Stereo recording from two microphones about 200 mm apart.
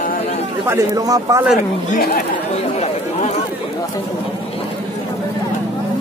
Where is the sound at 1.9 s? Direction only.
45° left (ahead or behind).